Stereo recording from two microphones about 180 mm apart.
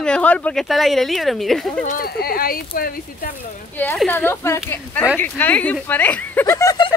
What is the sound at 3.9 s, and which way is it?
Speech, 10° left (ahead or behind).